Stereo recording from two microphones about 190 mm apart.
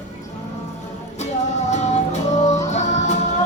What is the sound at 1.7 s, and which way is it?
Music, 35° left (ahead or behind).